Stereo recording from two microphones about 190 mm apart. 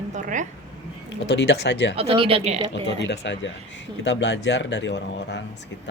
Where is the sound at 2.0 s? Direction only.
30° right (ahead or behind).